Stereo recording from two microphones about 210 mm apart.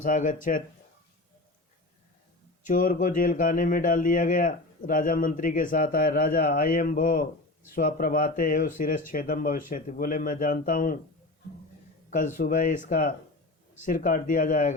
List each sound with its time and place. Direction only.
0.0 s speech: 40° left (ahead or behind)
2.6 s speech: 40° left (ahead or behind)
12.4 s speech: 40° left (ahead or behind)